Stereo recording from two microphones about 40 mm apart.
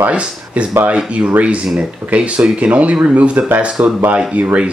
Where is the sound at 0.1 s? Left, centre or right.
Right.